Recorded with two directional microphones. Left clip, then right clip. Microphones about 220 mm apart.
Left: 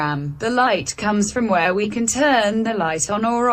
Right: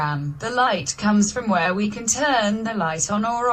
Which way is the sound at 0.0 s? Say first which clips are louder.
Left 3 dB; 65° left (ahead or behind).